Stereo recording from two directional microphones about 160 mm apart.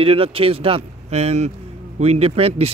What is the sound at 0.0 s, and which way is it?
Speech, 35° right (ahead or behind).